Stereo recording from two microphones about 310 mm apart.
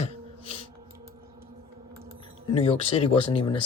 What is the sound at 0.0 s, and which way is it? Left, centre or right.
Music, centre.